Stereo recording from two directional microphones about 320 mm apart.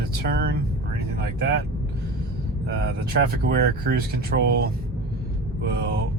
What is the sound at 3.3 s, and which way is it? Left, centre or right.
Speech, right.